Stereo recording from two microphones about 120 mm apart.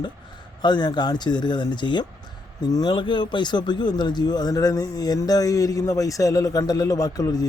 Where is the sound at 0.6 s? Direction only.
40° left (ahead or behind).